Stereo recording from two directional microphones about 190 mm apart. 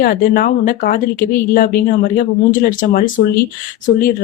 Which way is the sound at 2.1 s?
45° left (ahead or behind).